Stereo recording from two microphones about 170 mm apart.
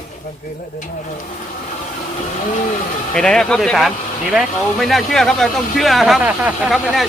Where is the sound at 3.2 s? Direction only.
5° left (ahead or behind).